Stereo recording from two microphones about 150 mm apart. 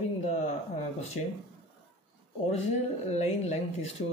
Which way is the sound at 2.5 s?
45° left (ahead or behind).